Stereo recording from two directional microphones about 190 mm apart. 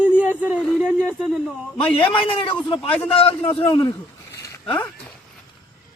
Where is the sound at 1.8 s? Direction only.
30° left (ahead or behind).